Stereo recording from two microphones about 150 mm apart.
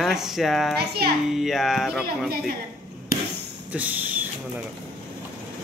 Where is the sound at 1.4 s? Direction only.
Centre (ahead or behind).